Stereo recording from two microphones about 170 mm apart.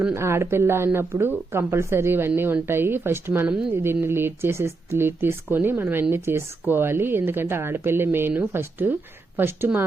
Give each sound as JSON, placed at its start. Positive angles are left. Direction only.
{"t": 0.0, "sound": "speech", "side_deg": -15}